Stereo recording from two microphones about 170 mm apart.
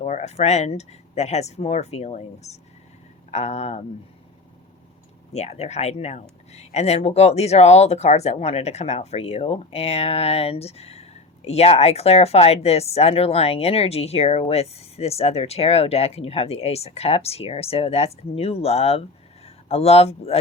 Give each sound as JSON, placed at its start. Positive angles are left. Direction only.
{"t": 0.0, "sound": "speech", "side_deg": 40}
{"t": 5.3, "sound": "speech", "side_deg": 40}